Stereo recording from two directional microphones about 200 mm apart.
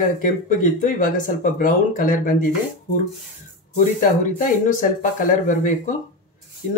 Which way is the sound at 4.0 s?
40° left (ahead or behind).